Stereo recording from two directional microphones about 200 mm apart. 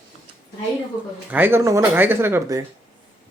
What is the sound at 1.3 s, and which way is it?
Speech, 10° right (ahead or behind).